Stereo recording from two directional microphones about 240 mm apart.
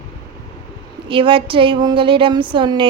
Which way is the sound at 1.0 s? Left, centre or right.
Right.